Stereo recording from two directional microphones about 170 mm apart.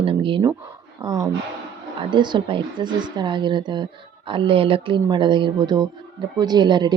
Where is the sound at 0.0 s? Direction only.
30° right (ahead or behind).